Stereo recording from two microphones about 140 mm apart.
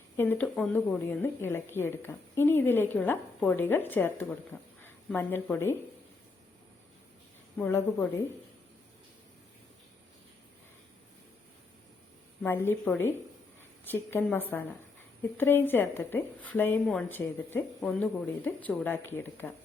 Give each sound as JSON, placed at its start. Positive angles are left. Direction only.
{"t": 0.2, "sound": "a woman's voice", "side_deg": 10}
{"t": 7.6, "sound": "a woman's voice", "side_deg": 20}
{"t": 12.4, "sound": "a woman's voice", "side_deg": 15}
{"t": 16.8, "sound": "speech", "side_deg": 0}
{"t": 17.1, "sound": "a woman's voice", "side_deg": 15}
{"t": 17.7, "sound": "a woman's voice", "side_deg": 5}